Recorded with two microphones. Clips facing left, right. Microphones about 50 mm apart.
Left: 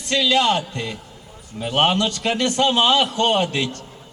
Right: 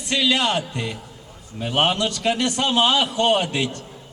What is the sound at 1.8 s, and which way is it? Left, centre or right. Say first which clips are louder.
A man's voice: left 1 dB; left.